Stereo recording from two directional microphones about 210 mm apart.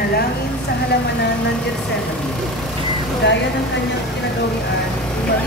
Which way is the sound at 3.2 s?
55° left (ahead or behind).